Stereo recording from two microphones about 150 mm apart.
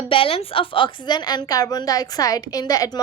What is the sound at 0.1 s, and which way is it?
A woman's voice, 35° left (ahead or behind).